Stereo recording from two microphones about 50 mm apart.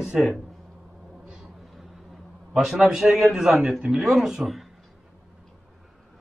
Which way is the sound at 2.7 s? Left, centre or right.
Centre.